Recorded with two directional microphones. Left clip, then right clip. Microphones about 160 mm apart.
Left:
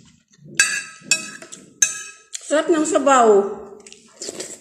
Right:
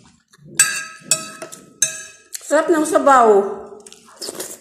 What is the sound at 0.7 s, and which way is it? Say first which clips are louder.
Chink: left 1 dB; 20° right (ahead or behind).